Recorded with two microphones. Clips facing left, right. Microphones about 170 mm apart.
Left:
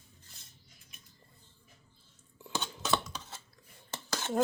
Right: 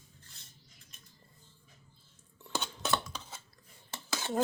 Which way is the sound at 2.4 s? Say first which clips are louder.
Even; centre (ahead or behind).